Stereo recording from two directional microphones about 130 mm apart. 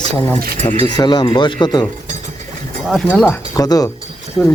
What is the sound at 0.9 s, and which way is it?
Speech, 35° left (ahead or behind).